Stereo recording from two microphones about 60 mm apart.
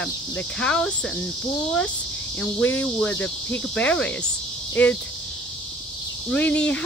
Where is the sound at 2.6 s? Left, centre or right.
Left.